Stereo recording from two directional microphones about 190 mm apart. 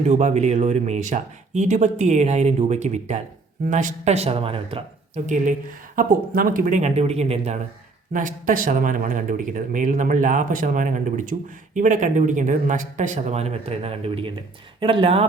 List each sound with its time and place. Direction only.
0.1 s speech: 40° right (ahead or behind)